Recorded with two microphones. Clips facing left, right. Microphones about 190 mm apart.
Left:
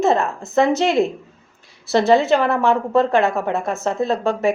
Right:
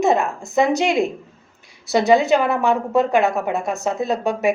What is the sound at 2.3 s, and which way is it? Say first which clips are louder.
A woman's voice: left 1 dB; 10° right (ahead or behind).